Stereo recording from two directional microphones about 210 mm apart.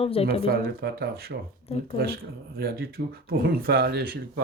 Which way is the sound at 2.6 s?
45° right (ahead or behind).